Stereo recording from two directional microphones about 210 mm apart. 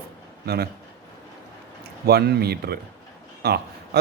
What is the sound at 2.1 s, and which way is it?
A man's voice, 50° right (ahead or behind).